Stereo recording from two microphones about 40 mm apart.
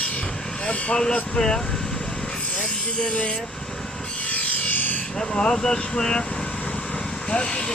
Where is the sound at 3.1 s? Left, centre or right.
Left.